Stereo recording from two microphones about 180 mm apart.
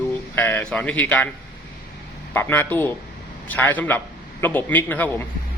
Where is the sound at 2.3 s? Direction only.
10° left (ahead or behind).